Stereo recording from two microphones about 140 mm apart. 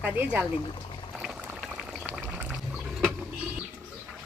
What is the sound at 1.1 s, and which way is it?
Pour, 5° right (ahead or behind).